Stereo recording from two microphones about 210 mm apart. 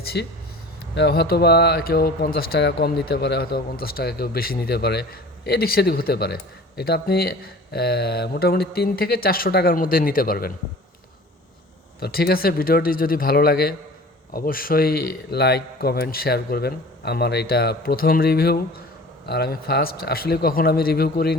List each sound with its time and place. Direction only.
0.0 s a sound: 50° left (ahead or behind)
0.9 s speech: 50° left (ahead or behind)
11.9 s speech: 50° left (ahead or behind)